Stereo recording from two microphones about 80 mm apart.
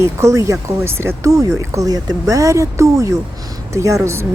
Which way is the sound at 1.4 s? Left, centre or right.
Right.